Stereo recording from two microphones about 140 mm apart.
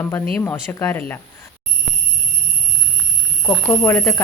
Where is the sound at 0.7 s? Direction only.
20° left (ahead or behind).